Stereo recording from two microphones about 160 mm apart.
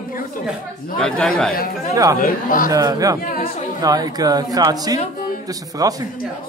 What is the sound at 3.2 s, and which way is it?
Speech, 60° left (ahead or behind).